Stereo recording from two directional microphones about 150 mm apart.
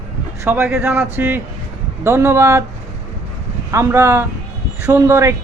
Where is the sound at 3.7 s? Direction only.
20° right (ahead or behind).